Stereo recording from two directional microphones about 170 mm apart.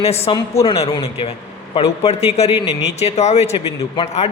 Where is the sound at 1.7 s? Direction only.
35° left (ahead or behind).